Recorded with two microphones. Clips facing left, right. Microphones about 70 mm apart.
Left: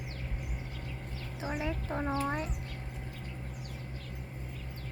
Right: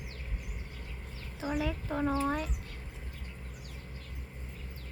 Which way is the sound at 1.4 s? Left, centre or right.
Left.